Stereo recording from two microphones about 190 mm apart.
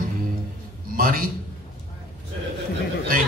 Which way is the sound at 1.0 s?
50° right (ahead or behind).